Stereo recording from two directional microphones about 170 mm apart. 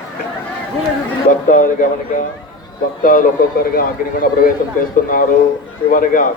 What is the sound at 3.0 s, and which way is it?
A man's voice, 55° left (ahead or behind).